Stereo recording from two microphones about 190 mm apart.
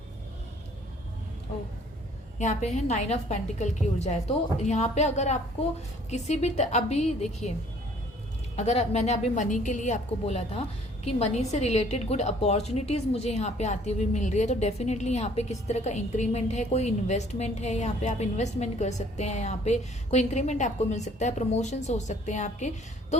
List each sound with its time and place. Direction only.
2.4 s a woman's voice: 40° left (ahead or behind)
8.5 s a woman's voice: 35° left (ahead or behind)